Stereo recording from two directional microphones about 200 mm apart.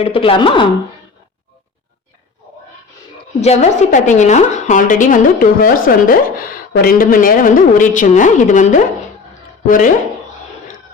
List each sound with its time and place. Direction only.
0.0 s speech: 30° left (ahead or behind)
3.4 s a woman's voice: 35° left (ahead or behind)